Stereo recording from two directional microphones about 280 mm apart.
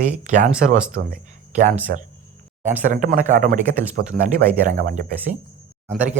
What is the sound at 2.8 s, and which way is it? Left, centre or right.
Speech, right.